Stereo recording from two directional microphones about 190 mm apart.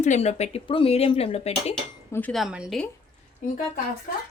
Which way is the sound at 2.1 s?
5° left (ahead or behind).